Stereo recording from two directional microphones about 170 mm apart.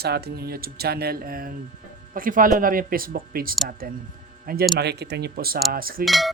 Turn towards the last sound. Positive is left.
turn(degrees=0)  # may be behind; listen again after turning